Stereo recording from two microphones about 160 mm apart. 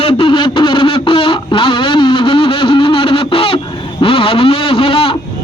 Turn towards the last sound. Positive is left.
turn(degrees=35)  # may be behind; listen again after turning